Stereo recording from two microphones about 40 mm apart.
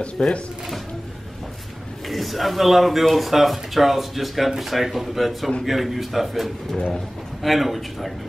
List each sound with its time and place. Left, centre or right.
0.0 s speech: left
2.0 s speech: centre